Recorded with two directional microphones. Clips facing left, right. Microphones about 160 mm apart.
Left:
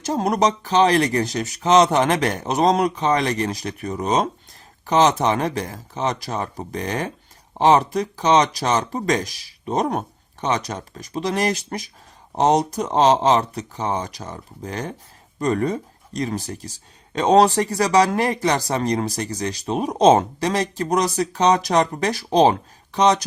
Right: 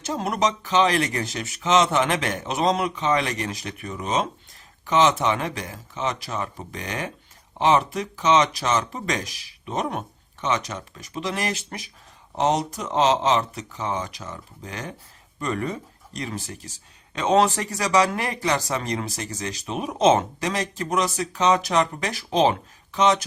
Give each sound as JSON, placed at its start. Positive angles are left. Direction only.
{"t": 0.0, "sound": "speech", "side_deg": 40}